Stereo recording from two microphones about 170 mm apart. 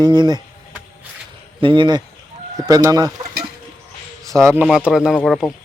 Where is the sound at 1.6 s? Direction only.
30° right (ahead or behind).